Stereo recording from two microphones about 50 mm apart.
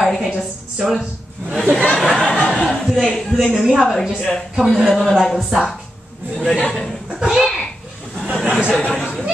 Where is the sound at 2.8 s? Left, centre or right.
Centre.